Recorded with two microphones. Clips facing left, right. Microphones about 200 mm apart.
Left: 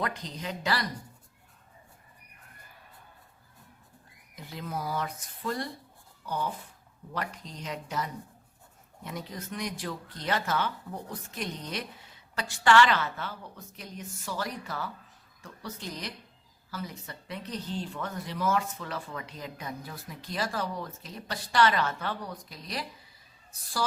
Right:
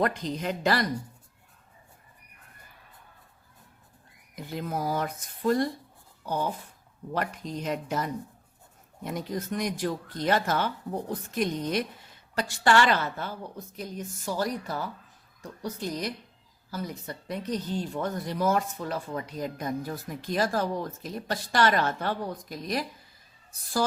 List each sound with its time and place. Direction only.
0.0 s speech: 50° right (ahead or behind)
4.5 s speech: 50° right (ahead or behind)
7.1 s speech: 50° right (ahead or behind)